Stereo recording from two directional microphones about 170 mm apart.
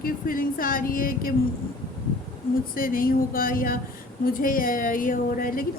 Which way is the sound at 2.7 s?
55° left (ahead or behind).